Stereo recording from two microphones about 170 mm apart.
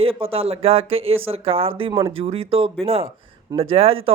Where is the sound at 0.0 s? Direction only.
35° right (ahead or behind).